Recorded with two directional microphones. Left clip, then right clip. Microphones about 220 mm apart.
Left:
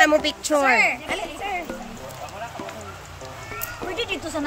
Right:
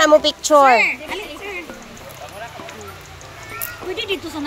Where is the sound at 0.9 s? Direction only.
15° left (ahead or behind).